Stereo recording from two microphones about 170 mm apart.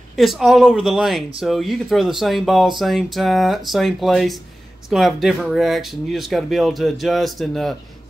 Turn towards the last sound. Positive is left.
turn(degrees=0)  # may be behind; listen again after turning